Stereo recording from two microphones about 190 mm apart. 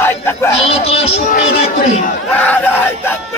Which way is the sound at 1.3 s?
40° left (ahead or behind).